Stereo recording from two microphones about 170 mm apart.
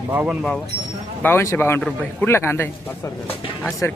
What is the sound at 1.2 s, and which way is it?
A man's voice, 15° left (ahead or behind).